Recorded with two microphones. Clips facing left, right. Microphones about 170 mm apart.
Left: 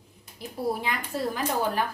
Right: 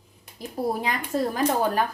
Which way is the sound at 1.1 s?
50° right (ahead or behind).